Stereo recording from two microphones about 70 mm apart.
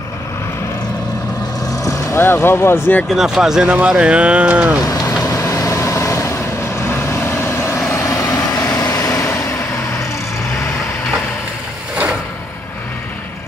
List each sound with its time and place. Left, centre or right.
2.1 s speech: left
3.1 s speech: centre
4.8 s vehicle: left